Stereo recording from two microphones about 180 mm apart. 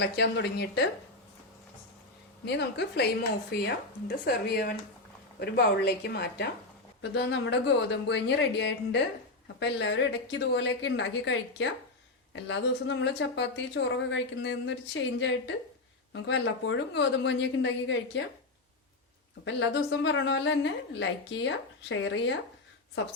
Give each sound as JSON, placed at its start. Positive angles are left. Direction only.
{"t": 0.0, "sound": "speech", "side_deg": 65}
{"t": 2.4, "sound": "a woman's voice", "side_deg": 70}
{"t": 19.5, "sound": "speech", "side_deg": 85}